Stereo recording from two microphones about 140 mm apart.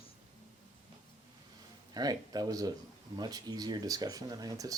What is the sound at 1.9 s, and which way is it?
Speech, 25° right (ahead or behind).